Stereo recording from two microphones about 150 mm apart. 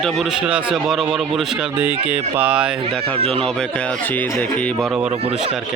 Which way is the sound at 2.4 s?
10° right (ahead or behind).